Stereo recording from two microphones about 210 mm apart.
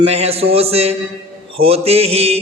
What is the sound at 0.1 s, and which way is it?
A man's voice, 30° right (ahead or behind).